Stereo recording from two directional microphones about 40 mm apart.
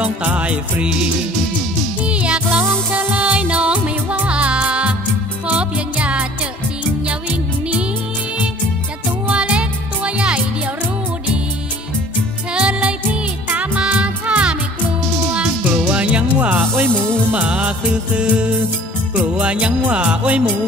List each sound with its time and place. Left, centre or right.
0.2 s music: right
2.0 s music: right
2.6 s music: right
3.1 s music: right
9.3 s music: right
12.5 s music: right